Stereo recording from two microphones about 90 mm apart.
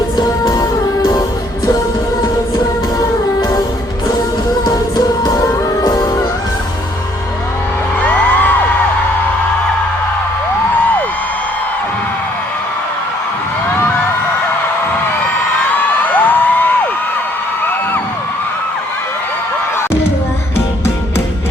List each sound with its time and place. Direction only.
0.2 s music: 45° left (ahead or behind)
4.6 s music: 45° left (ahead or behind)
8.0 s music: 15° left (ahead or behind)
16.0 s a sound: 20° left (ahead or behind)